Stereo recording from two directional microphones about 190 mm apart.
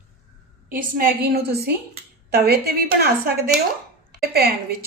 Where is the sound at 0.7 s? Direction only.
50° right (ahead or behind).